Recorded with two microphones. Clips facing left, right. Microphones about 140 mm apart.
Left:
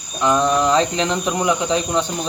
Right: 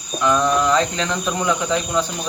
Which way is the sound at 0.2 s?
20° left (ahead or behind).